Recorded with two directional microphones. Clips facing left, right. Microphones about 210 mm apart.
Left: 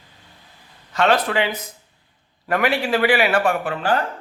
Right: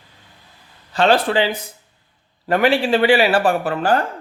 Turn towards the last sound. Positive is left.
turn(degrees=-40)  # may be behind; listen again after turning